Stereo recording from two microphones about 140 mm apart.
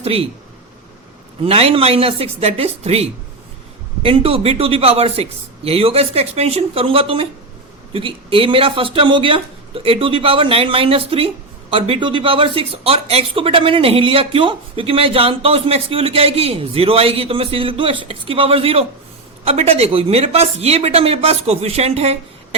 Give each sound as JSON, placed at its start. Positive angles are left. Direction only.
{"t": 0.0, "sound": "speech", "side_deg": -45}
{"t": 1.5, "sound": "a man's voice", "side_deg": -45}